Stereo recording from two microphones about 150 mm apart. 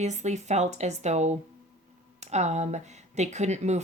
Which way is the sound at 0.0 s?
50° right (ahead or behind).